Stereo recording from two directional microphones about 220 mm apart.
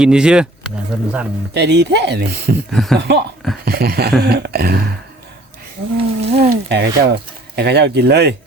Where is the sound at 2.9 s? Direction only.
50° right (ahead or behind).